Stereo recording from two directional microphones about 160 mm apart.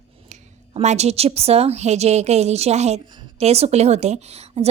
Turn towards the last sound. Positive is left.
turn(degrees=-40)  # may be behind; listen again after turning